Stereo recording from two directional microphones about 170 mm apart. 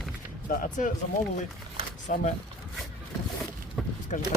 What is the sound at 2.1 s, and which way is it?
Speech, 50° left (ahead or behind).